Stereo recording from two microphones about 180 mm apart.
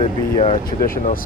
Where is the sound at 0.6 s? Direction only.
50° left (ahead or behind).